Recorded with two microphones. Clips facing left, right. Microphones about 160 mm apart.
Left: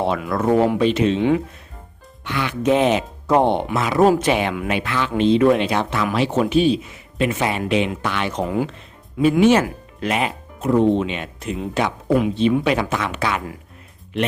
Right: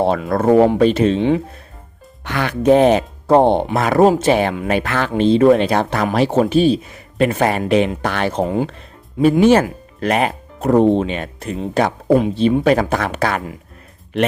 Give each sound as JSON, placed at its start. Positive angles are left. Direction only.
{"t": 0.0, "sound": "speech", "side_deg": -30}
{"t": 0.3, "sound": "speech", "side_deg": -45}
{"t": 2.2, "sound": "speech", "side_deg": -45}
{"t": 8.3, "sound": "speech", "side_deg": -30}
{"t": 10.0, "sound": "speech", "side_deg": -45}